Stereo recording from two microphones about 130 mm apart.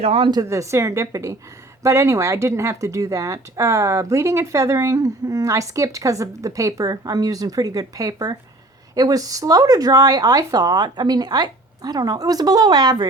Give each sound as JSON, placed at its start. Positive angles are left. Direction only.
{"t": 0.0, "sound": "speech", "side_deg": -50}
{"t": 0.4, "sound": "speech", "side_deg": -25}